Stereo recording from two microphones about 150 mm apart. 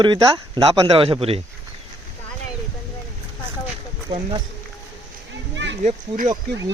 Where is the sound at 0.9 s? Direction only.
40° right (ahead or behind).